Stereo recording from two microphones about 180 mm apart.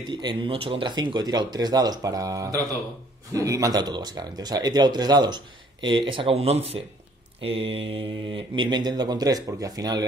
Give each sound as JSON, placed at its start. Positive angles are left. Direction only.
{"t": 0.1, "sound": "speech", "side_deg": -25}